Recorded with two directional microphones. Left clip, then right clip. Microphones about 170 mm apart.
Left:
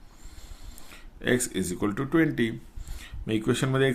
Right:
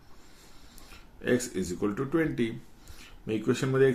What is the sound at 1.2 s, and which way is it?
Speech, 60° left (ahead or behind).